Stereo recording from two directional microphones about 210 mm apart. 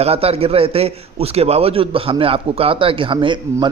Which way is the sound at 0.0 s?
30° right (ahead or behind).